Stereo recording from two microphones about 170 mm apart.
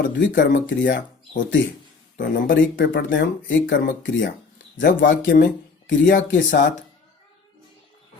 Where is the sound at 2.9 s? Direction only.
90° left.